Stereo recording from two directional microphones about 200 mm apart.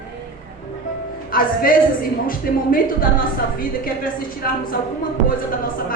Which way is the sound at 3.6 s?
45° left (ahead or behind).